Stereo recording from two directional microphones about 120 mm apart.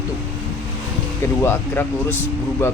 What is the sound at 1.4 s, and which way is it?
Speech, 20° left (ahead or behind).